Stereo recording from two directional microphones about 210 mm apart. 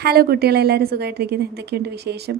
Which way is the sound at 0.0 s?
45° right (ahead or behind).